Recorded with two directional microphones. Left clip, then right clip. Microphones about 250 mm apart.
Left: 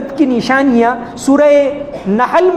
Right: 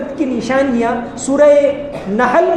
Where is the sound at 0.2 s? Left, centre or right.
Left.